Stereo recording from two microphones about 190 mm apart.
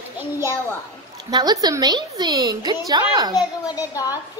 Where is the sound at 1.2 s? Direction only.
20° right (ahead or behind).